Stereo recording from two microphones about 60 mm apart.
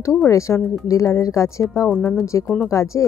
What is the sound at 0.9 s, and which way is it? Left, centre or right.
Speech, left.